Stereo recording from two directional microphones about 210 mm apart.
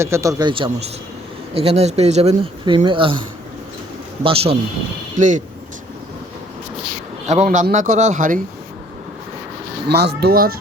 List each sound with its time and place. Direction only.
0.0 s a man's voice: 15° right (ahead or behind)
5.1 s speech: 35° right (ahead or behind)
7.3 s speech: 35° right (ahead or behind)
9.9 s speech: 50° right (ahead or behind)